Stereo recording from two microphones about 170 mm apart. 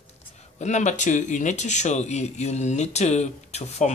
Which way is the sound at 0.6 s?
45° left (ahead or behind).